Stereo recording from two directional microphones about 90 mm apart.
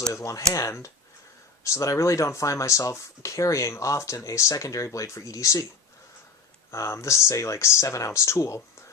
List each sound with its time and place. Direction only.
0.1 s speech: 35° left (ahead or behind)
6.7 s speech: 30° left (ahead or behind)